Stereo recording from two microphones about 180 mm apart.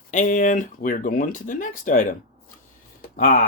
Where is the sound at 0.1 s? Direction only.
45° left (ahead or behind).